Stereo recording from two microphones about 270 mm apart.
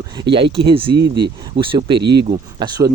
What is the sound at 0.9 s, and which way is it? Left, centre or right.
Speech, right.